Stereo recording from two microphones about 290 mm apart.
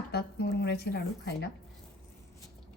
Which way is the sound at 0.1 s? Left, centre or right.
Left.